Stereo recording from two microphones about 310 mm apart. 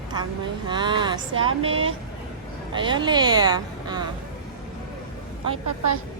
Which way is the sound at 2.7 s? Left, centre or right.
Centre.